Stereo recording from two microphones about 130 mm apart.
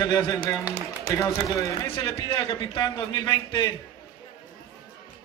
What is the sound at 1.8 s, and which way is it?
A man's voice, 45° left (ahead or behind).